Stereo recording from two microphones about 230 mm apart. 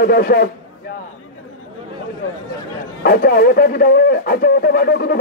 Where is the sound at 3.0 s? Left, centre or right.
Left.